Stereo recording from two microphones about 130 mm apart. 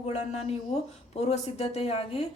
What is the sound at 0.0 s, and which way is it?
A woman's voice, 55° left (ahead or behind).